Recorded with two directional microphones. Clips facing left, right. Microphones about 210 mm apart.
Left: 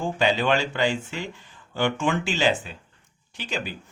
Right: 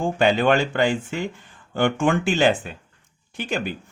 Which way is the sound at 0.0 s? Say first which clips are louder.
Right 4 dB; 50° right (ahead or behind).